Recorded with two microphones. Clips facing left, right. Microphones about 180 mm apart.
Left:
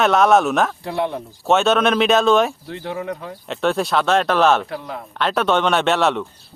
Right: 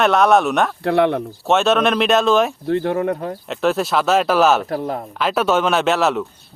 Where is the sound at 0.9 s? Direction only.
65° right (ahead or behind).